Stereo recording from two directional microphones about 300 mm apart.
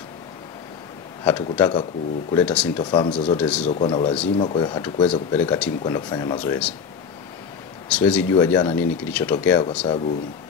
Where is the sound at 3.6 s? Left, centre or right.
Centre.